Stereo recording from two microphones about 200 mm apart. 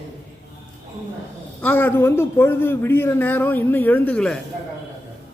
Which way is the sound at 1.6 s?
10° left (ahead or behind).